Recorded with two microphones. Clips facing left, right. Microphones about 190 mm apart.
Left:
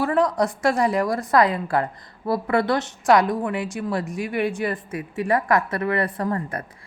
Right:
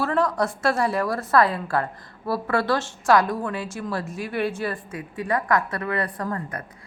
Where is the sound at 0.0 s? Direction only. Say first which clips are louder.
Left 2 dB; 15° left (ahead or behind).